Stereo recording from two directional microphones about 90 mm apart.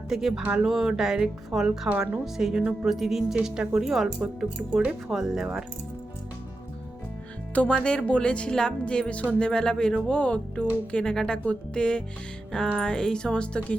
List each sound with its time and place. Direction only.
0.1 s speech: 5° right (ahead or behind)
1.9 s speech: 15° right (ahead or behind)
2.2 s speech: 5° right (ahead or behind)
7.5 s speech: 15° left (ahead or behind)
12.5 s music: 5° left (ahead or behind)
12.8 s speech: 5° left (ahead or behind)